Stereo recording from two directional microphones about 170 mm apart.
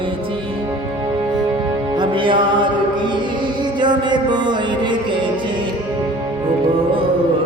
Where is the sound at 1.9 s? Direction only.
30° right (ahead or behind).